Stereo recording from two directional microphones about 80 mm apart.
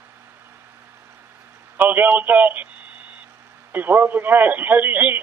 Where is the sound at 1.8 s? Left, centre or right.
Right.